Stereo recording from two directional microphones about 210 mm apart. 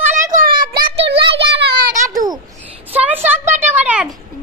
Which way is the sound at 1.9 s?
15° right (ahead or behind).